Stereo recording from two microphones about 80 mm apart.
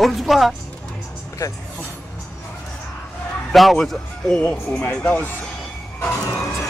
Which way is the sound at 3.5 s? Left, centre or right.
Centre.